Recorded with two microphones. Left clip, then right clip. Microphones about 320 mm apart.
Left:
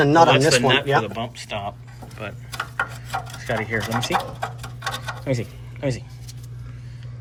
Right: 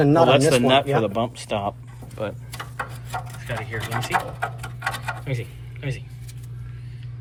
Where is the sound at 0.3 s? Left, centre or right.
Centre.